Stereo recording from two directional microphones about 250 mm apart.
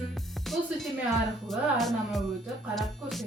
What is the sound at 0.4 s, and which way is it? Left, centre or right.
A woman's voice, centre.